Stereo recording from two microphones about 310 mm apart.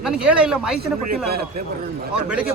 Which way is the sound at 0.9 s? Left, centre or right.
Right.